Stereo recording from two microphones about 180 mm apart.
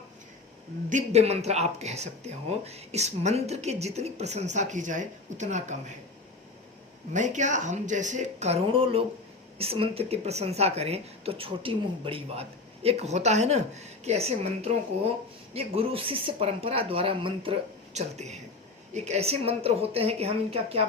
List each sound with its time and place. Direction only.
0.9 s speech: 40° right (ahead or behind)
7.1 s speech: 45° right (ahead or behind)